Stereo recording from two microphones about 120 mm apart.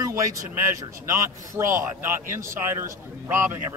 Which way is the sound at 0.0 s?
30° right (ahead or behind).